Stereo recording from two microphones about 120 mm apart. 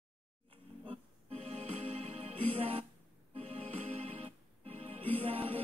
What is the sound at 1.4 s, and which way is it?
Music, 60° right (ahead or behind).